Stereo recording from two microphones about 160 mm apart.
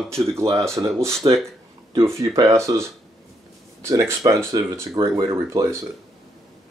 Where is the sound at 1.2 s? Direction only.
30° right (ahead or behind).